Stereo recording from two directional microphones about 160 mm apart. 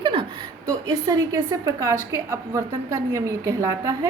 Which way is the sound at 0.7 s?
20° right (ahead or behind).